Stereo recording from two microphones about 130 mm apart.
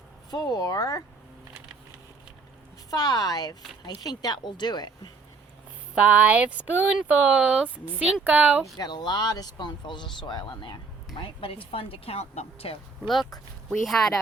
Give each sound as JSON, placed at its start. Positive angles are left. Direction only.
{"t": 0.3, "sound": "speech", "side_deg": 30}
{"t": 2.9, "sound": "speech", "side_deg": 30}
{"t": 5.9, "sound": "speech", "side_deg": -10}
{"t": 8.8, "sound": "speech", "side_deg": 30}
{"t": 13.7, "sound": "speech", "side_deg": 5}